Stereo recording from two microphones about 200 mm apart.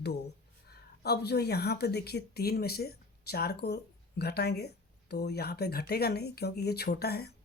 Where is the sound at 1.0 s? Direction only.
55° left (ahead or behind).